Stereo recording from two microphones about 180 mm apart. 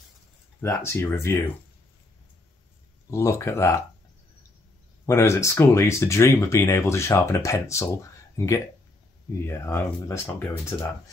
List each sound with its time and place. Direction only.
0.6 s speech: 15° left (ahead or behind)
3.1 s speech: 15° left (ahead or behind)
5.0 s speech: 15° left (ahead or behind)
9.4 s speech: 15° left (ahead or behind)